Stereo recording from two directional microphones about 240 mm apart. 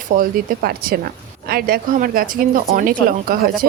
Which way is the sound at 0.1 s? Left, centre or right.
Right.